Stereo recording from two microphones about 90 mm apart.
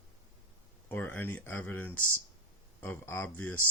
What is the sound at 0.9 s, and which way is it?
Speech, 25° left (ahead or behind).